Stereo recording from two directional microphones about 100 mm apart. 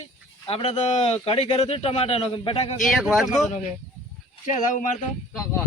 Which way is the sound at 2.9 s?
Centre (ahead or behind).